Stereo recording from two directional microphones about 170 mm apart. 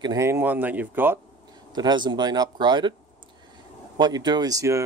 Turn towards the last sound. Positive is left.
turn(degrees=-20)  # may be behind; listen again after turning